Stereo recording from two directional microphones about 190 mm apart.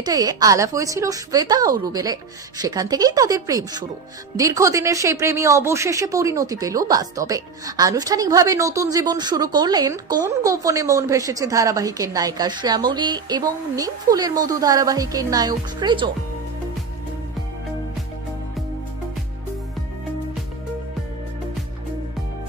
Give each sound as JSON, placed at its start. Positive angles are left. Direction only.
{"t": 0.0, "sound": "speech", "side_deg": -20}